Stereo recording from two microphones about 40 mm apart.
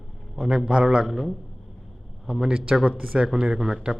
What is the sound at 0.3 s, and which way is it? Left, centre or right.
Speech, centre.